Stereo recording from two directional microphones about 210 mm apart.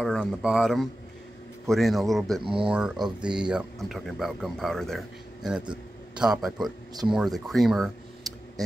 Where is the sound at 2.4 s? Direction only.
25° right (ahead or behind).